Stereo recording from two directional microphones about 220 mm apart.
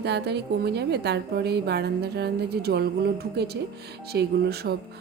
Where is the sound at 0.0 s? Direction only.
50° right (ahead or behind).